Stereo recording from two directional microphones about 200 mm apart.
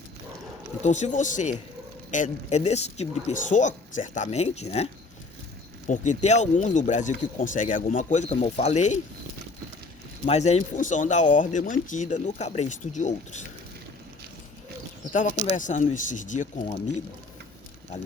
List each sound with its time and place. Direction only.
0.8 s speech: 35° left (ahead or behind)
5.9 s speech: 35° left (ahead or behind)
10.2 s speech: 35° left (ahead or behind)
15.5 s speech: 40° left (ahead or behind)